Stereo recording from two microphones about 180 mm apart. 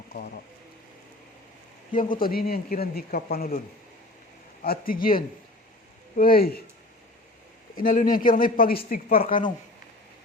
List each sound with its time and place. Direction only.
0.1 s speech: 60° left (ahead or behind)
1.9 s speech: 50° left (ahead or behind)
4.6 s speech: 55° left (ahead or behind)
7.8 s speech: 50° left (ahead or behind)